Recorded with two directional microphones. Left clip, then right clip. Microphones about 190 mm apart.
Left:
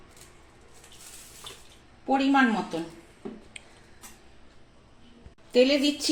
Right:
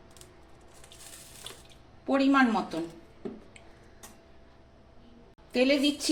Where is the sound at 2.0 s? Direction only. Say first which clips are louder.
Left 1 dB; 35° left (ahead or behind).